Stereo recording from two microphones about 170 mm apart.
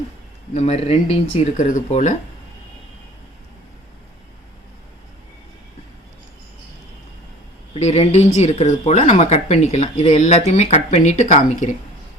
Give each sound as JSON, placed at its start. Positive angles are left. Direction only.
{"t": 0.5, "sound": "speech", "side_deg": 40}
{"t": 7.7, "sound": "speech", "side_deg": 40}